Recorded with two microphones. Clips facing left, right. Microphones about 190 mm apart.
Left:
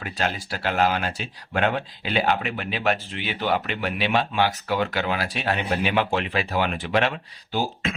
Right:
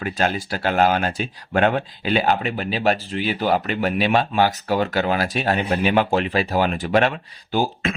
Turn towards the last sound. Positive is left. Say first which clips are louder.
# right 4 dB
turn(degrees=-55)  # may be behind; listen again after turning